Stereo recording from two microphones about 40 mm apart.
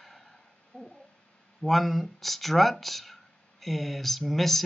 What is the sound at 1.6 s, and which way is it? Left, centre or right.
Speech, centre.